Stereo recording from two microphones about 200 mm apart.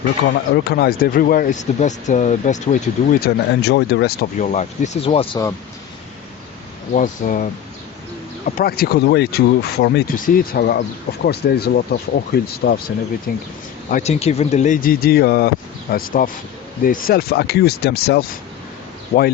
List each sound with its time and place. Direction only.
0.5 s speech: 55° left (ahead or behind)
4.4 s speech: 35° left (ahead or behind)
6.9 s speech: 40° left (ahead or behind)
8.4 s speech: 45° left (ahead or behind)
13.9 s speech: 35° left (ahead or behind)